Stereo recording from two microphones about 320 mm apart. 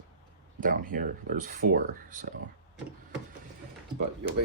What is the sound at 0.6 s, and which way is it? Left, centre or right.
Speech, right.